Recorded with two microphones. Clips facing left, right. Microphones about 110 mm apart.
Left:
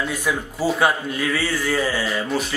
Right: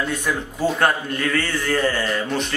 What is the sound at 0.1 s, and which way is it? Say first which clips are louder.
A man's voice: even; 5° left (ahead or behind).